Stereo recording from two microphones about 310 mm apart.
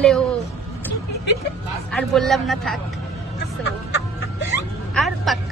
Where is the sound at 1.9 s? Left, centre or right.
Centre.